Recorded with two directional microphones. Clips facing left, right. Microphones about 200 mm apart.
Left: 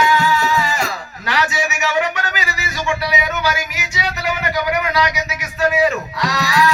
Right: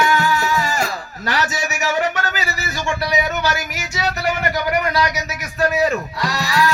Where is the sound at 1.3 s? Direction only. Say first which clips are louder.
Left 2 dB; 45° right (ahead or behind).